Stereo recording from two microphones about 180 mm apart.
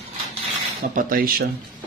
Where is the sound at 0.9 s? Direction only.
50° right (ahead or behind).